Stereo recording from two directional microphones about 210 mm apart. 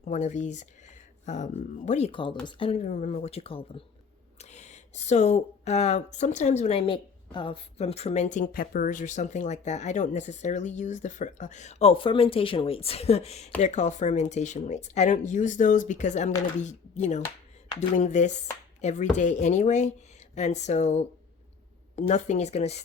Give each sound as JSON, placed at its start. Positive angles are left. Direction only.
{"t": 0.0, "sound": "speech", "side_deg": 35}